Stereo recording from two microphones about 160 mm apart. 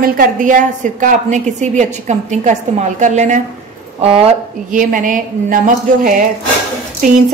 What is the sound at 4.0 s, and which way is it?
Speech, 35° right (ahead or behind).